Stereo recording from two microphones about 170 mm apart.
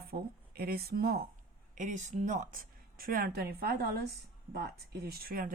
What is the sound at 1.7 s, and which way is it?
Speech, 45° right (ahead or behind).